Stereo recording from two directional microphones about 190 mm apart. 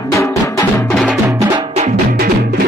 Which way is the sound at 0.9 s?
Centre (ahead or behind).